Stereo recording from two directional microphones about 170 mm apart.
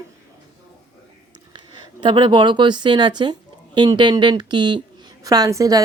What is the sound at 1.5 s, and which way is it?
Speech, 25° right (ahead or behind).